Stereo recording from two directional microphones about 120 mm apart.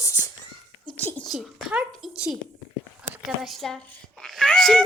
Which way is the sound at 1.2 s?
Centre (ahead or behind).